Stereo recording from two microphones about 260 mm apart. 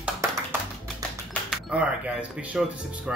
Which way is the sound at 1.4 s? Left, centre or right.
Centre.